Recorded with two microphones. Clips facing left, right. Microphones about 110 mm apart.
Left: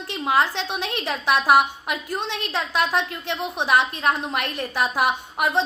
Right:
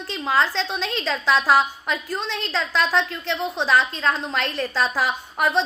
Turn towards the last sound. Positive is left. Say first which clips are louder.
# right 1 dB
turn(degrees=15)  # may be behind; listen again after turning